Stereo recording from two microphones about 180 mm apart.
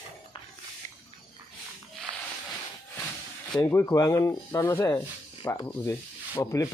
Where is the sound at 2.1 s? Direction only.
25° right (ahead or behind).